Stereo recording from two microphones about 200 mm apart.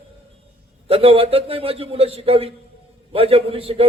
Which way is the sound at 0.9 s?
30° right (ahead or behind).